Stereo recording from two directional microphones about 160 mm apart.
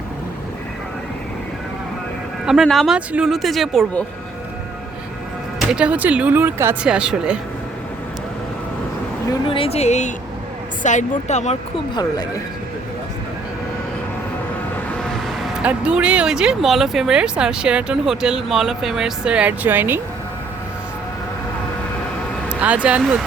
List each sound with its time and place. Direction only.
2.5 s speech: centre (ahead or behind)
5.5 s speech: 5° right (ahead or behind)
9.5 s speech: 35° left (ahead or behind)
11.9 s speech: 25° left (ahead or behind)
14.8 s speech: 5° left (ahead or behind); by 20.0 s 10° right (ahead or behind)
22.4 s speech: 10° right (ahead or behind)